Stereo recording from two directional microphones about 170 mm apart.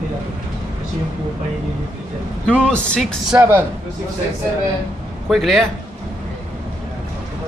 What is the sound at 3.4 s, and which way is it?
Speech, 10° right (ahead or behind).